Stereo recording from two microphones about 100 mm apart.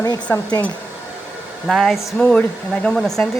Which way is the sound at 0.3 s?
20° left (ahead or behind).